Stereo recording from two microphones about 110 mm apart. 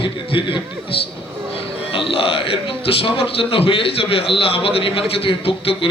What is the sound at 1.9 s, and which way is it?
Speech, 55° left (ahead or behind).